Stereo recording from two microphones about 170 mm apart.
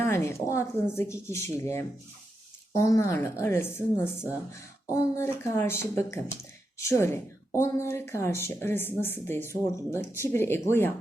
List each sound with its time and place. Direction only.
0.0 s a woman's voice: 15° left (ahead or behind)